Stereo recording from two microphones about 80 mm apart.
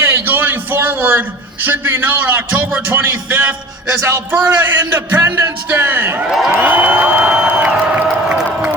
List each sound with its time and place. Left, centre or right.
0.0 s a sound: right
1.6 s a man's voice: right
8.3 s crowd: centre